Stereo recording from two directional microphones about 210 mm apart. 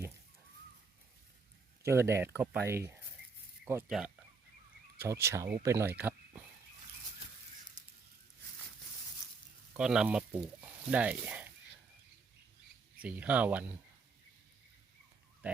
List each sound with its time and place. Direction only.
1.8 s speech: 10° right (ahead or behind)
7.8 s a sound: 35° right (ahead or behind)
9.7 s speech: 5° right (ahead or behind)
13.0 s speech: 5° right (ahead or behind)